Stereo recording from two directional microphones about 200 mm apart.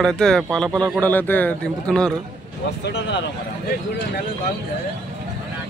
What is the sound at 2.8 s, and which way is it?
Speech, 60° left (ahead or behind).